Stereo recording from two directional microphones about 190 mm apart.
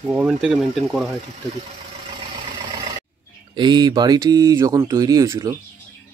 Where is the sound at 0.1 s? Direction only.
5° right (ahead or behind).